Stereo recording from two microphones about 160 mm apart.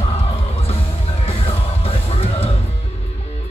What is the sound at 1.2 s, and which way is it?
Music, 40° left (ahead or behind).